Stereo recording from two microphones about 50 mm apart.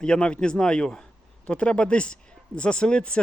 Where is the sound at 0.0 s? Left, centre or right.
Centre.